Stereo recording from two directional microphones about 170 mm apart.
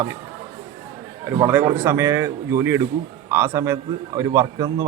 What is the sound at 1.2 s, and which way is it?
Speech, 15° right (ahead or behind).